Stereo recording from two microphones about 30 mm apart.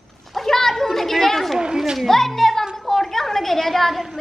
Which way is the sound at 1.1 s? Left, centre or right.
Centre.